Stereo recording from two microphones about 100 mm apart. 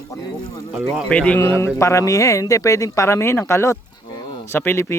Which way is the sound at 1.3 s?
30° left (ahead or behind).